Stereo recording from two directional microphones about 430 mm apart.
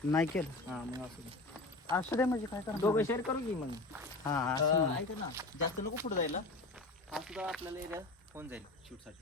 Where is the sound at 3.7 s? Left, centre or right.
Centre.